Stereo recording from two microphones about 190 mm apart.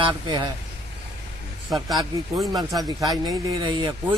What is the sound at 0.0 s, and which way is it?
Speech, 25° right (ahead or behind).